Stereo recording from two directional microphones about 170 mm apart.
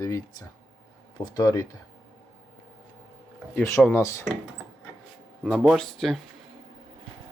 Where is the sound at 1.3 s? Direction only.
20° left (ahead or behind).